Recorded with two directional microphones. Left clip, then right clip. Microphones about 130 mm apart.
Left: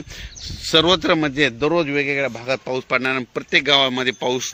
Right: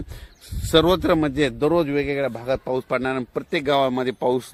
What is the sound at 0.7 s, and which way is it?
A man's voice, 15° right (ahead or behind).